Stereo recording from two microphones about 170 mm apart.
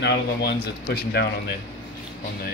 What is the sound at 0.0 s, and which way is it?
Speech, 90° left.